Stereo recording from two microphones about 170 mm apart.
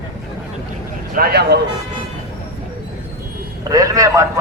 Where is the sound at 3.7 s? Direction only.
20° right (ahead or behind).